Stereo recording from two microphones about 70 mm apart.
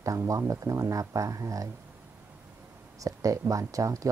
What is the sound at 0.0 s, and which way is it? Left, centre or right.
Speech, right.